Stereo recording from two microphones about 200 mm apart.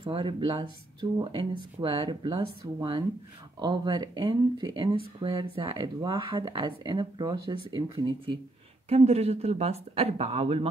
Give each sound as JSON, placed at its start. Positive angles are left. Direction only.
{"t": 0.0, "sound": "speech", "side_deg": -25}